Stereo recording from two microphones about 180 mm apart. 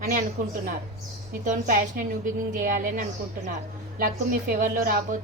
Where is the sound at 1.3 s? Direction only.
55° right (ahead or behind).